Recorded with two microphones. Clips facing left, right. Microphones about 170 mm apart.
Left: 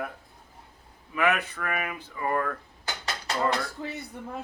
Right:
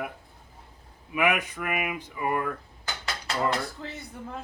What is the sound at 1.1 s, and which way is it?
Speech, 15° right (ahead or behind).